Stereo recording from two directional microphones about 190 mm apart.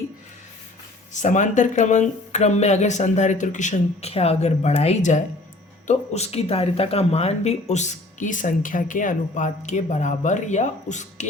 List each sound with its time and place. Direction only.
1.1 s speech: 40° left (ahead or behind)